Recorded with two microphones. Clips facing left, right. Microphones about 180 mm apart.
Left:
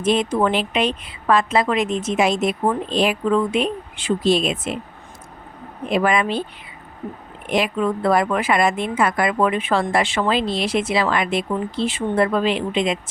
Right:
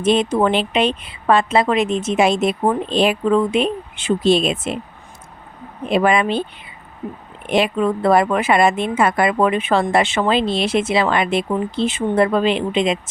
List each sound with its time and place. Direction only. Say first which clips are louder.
0.0 s a woman's voice: right 3 dB; 25° right (ahead or behind)
5.9 s a woman's voice: right 3 dB; 25° right (ahead or behind)
7.5 s a woman's voice: right 3 dB; 25° right (ahead or behind)